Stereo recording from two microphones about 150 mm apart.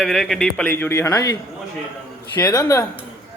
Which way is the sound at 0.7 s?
15° left (ahead or behind).